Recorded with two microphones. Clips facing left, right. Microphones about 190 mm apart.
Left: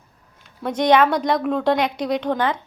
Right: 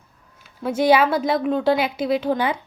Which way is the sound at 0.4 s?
5° right (ahead or behind).